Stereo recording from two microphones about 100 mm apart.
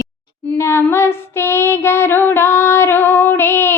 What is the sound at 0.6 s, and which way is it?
Female singing, 25° left (ahead or behind).